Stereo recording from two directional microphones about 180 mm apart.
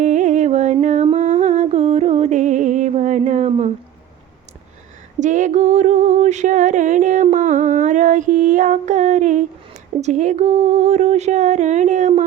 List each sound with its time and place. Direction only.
0.0 s humming: 45° right (ahead or behind)
5.2 s music: 45° right (ahead or behind)
10.0 s speech: 40° right (ahead or behind)